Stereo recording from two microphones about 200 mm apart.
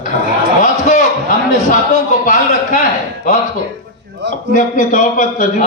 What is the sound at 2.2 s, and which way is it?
A man's voice, 40° left (ahead or behind).